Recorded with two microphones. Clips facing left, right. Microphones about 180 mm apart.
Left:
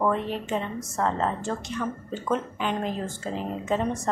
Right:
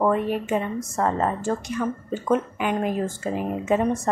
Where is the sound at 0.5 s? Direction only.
10° right (ahead or behind).